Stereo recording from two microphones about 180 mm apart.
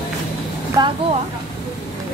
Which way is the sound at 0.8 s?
20° right (ahead or behind).